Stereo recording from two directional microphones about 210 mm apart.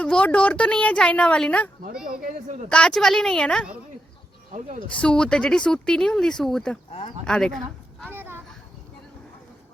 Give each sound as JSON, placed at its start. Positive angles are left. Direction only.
{"t": 0.0, "sound": "speech", "side_deg": 5}
{"t": 2.0, "sound": "speech", "side_deg": -35}
{"t": 2.6, "sound": "speech", "side_deg": 5}
{"t": 4.9, "sound": "speech", "side_deg": 5}
{"t": 8.0, "sound": "a sound", "side_deg": -10}